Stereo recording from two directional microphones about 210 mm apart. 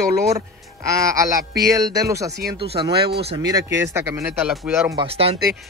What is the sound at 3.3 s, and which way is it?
Speech, 15° right (ahead or behind).